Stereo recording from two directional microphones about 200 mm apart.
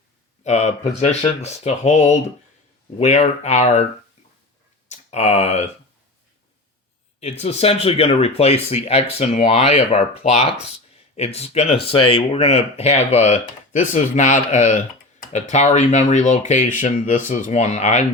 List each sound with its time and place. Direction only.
0.4 s speech: 35° left (ahead or behind)
4.9 s speech: 35° left (ahead or behind)
7.2 s speech: 30° left (ahead or behind)